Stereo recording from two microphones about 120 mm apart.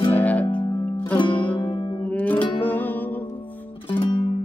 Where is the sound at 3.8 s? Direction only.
45° left (ahead or behind).